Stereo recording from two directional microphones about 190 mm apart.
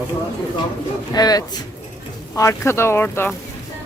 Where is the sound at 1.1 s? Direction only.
20° left (ahead or behind).